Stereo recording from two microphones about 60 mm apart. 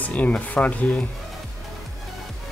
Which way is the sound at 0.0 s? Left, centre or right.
Left.